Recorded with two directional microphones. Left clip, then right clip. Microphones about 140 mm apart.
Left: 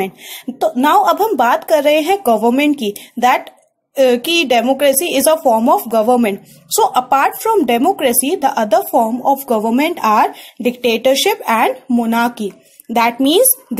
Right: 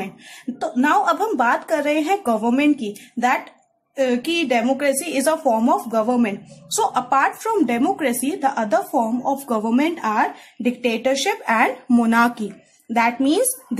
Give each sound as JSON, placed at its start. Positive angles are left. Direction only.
{"t": 0.6, "sound": "a child's voice", "side_deg": 30}
{"t": 12.1, "sound": "speech", "side_deg": 15}
{"t": 12.9, "sound": "speech", "side_deg": 35}